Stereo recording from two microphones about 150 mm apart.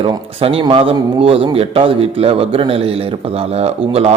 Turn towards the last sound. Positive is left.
turn(degrees=-45)  # may be behind; listen again after turning